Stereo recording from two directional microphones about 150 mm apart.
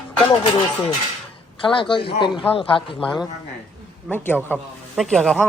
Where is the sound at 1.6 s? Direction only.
35° left (ahead or behind).